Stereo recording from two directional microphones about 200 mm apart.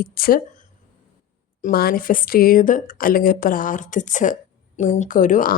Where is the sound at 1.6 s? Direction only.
45° left (ahead or behind).